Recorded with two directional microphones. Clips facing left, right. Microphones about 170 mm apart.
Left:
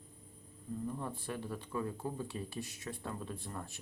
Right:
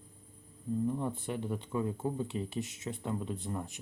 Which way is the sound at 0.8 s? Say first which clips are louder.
Right 6 dB; 20° right (ahead or behind).